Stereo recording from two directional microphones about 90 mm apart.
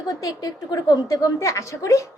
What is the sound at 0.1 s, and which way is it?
A woman's voice, 40° left (ahead or behind).